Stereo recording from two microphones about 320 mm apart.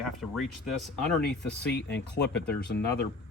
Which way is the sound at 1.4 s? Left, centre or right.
Left.